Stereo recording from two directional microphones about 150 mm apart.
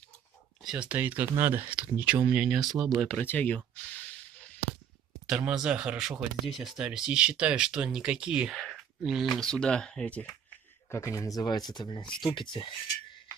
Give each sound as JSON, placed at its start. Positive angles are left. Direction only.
{"t": 0.7, "sound": "speech", "side_deg": -10}
{"t": 3.0, "sound": "speech", "side_deg": 10}
{"t": 5.3, "sound": "speech", "side_deg": -5}
{"t": 10.9, "sound": "speech", "side_deg": 20}